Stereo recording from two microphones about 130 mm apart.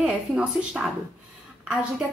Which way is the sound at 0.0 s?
5° right (ahead or behind).